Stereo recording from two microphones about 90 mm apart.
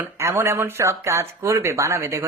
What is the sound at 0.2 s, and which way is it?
Speech, 30° right (ahead or behind).